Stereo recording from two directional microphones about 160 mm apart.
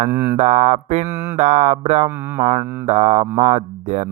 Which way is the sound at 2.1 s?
10° right (ahead or behind).